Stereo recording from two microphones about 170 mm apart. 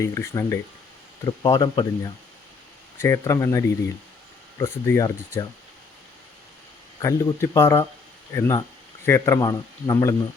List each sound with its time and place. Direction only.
0.0 s a man's voice: 15° left (ahead or behind)
3.0 s speech: 15° left (ahead or behind)
7.0 s a man's voice: 20° left (ahead or behind)